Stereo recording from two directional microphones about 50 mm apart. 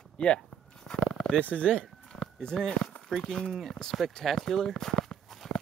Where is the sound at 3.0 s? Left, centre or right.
Centre.